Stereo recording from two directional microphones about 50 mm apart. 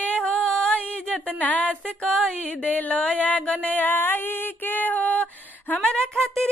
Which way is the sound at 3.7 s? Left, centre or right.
Left.